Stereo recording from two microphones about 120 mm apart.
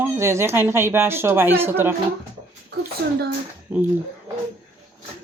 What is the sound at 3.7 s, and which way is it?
Speech, 15° right (ahead or behind).